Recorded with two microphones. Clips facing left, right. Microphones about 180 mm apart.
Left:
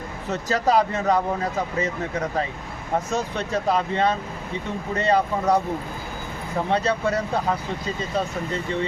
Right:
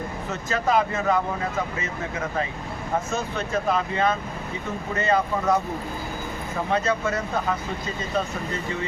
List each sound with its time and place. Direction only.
0.3 s speech: 35° left (ahead or behind)
3.1 s speech: 35° left (ahead or behind)
6.7 s speech: 35° left (ahead or behind)